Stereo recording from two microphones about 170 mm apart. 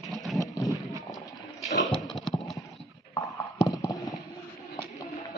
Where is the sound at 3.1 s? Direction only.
20° left (ahead or behind).